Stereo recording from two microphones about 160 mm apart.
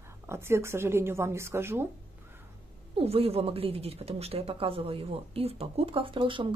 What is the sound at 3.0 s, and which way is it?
Speech, 40° right (ahead or behind).